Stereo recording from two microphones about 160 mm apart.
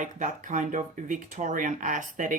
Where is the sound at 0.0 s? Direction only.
50° right (ahead or behind).